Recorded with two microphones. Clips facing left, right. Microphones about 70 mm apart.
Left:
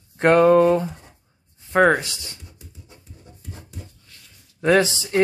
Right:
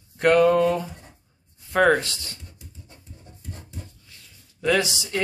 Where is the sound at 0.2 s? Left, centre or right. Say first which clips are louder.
Left 3 dB; left.